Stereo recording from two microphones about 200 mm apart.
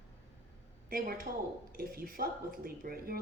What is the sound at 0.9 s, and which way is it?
Speech, 45° right (ahead or behind).